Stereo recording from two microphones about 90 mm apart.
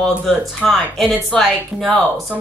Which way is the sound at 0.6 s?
5° left (ahead or behind).